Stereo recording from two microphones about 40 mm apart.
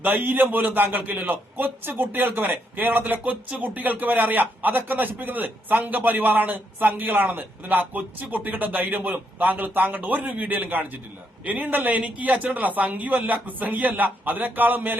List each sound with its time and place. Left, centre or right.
0.0 s a man's voice: right
10.1 s a man's voice: right